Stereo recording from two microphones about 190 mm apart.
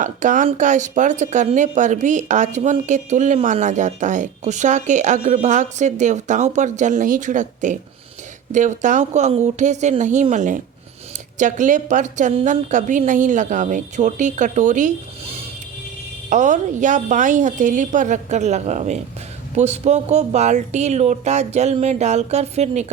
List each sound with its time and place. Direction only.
0.0 s speech: 40° right (ahead or behind)